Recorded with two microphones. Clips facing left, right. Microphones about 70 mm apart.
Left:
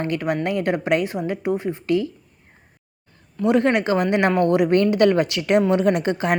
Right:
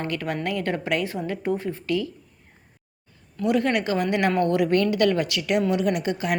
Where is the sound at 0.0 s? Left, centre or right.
Left.